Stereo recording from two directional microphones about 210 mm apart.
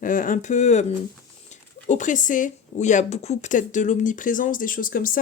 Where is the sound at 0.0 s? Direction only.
40° left (ahead or behind).